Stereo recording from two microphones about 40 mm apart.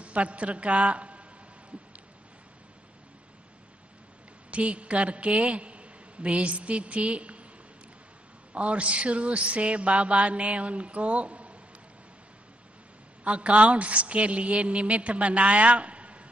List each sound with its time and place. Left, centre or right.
0.0 s a woman's voice: right
4.5 s a woman's voice: right
8.5 s a woman's voice: right
13.2 s a woman's voice: right